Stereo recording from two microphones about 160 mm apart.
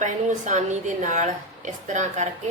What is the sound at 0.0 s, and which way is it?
A woman's voice, 50° right (ahead or behind).